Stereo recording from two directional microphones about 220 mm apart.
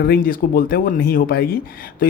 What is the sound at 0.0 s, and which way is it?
Speech, 40° left (ahead or behind).